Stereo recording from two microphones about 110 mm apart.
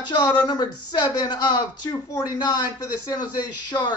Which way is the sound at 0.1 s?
40° left (ahead or behind).